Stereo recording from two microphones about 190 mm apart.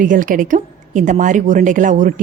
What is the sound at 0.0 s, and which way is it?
A woman's voice, 45° right (ahead or behind).